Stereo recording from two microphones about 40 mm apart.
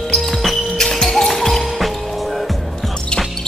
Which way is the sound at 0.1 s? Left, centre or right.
Centre.